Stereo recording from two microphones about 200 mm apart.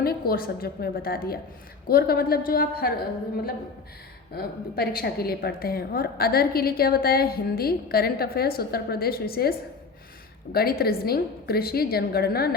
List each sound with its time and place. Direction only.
0.0 s a woman's voice: 50° left (ahead or behind)
4.4 s a woman's voice: 50° left (ahead or behind)